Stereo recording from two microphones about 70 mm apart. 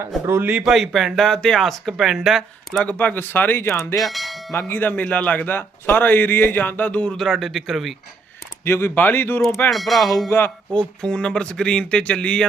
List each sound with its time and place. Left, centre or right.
0.3 s a man's voice: right
0.6 s speech: centre
2.8 s speech: left
4.0 s speech: centre
4.5 s a man's voice: left
7.2 s speech: centre
8.6 s speech: left
9.6 s speech: centre
10.2 s speech: left
10.7 s speech: centre